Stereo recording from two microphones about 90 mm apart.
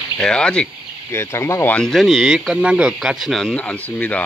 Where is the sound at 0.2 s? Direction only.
10° left (ahead or behind).